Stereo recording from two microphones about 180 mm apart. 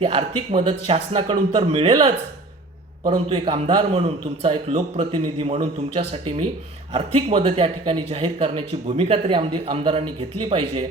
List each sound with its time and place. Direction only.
0.0 s speech: 30° right (ahead or behind)